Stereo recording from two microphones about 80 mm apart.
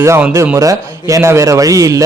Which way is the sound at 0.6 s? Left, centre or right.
Right.